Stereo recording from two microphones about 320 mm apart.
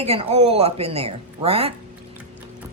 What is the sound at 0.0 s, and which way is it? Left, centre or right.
Speech, centre.